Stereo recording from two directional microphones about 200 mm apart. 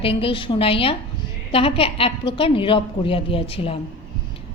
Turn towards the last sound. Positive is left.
turn(degrees=30)  # may be behind; listen again after turning